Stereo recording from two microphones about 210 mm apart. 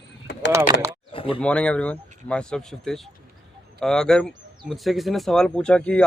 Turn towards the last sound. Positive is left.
turn(degrees=5)  # may be behind; listen again after turning